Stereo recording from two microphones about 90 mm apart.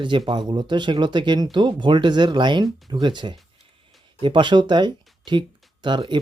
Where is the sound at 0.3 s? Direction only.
55° right (ahead or behind).